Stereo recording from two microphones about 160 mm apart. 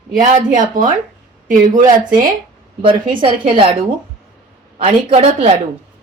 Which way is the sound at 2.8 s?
30° right (ahead or behind).